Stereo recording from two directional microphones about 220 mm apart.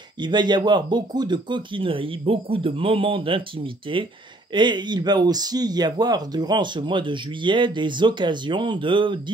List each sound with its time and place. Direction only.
0.2 s speech: 20° right (ahead or behind)